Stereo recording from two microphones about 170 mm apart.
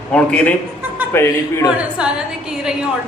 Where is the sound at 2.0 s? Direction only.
5° right (ahead or behind).